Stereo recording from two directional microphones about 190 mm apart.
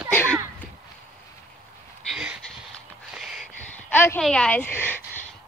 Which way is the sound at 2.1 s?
5° right (ahead or behind).